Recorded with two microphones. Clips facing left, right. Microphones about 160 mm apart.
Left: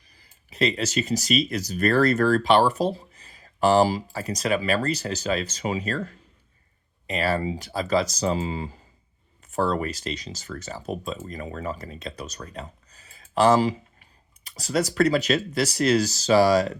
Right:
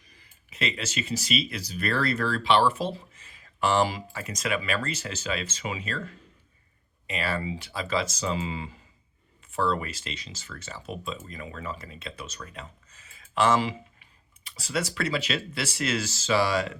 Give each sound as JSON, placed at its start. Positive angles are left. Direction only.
{"t": 0.1, "sound": "speech", "side_deg": 35}
{"t": 7.1, "sound": "speech", "side_deg": 40}